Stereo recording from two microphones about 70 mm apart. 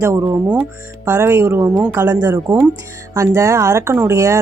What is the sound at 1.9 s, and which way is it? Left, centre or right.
Speech, right.